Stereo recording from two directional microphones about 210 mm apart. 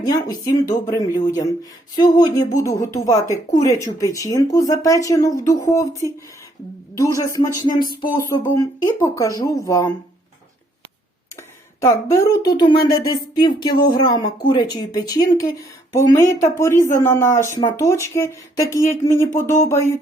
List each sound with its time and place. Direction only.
0.0 s speech: 20° left (ahead or behind)
11.8 s speech: 15° left (ahead or behind)